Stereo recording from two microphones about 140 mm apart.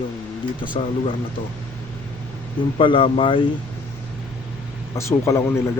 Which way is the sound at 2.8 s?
40° left (ahead or behind).